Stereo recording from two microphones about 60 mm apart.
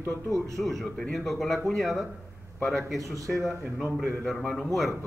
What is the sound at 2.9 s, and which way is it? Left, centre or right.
Speech, right.